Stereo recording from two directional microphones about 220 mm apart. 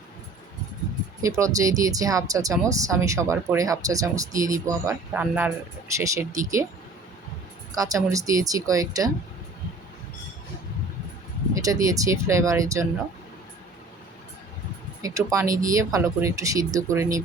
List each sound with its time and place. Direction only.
1.2 s speech: 15° right (ahead or behind)
7.7 s speech: 15° right (ahead or behind)
11.5 s speech: 15° right (ahead or behind)
15.0 s speech: 15° right (ahead or behind)